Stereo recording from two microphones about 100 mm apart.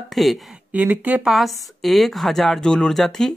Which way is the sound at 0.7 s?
15° right (ahead or behind).